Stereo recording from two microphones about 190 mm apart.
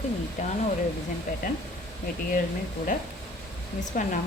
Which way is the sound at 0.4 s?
40° left (ahead or behind).